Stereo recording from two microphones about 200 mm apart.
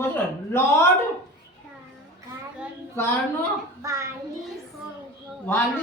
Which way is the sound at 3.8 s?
15° right (ahead or behind).